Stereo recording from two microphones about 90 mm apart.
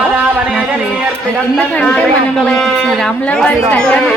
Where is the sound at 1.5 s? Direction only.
15° left (ahead or behind).